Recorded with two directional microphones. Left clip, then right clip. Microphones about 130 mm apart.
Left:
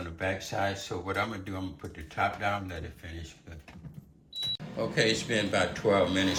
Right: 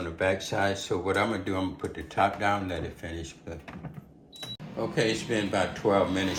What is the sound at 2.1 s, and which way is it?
Speech, 80° right.